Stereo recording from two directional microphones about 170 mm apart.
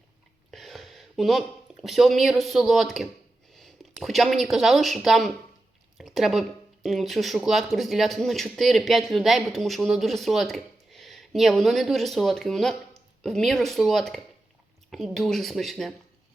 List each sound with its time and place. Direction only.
0.5 s speech: centre (ahead or behind)